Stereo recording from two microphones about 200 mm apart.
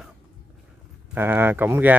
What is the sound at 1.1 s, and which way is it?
Speech, 10° right (ahead or behind).